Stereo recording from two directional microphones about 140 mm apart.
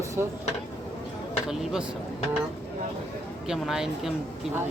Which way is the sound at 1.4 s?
5° right (ahead or behind).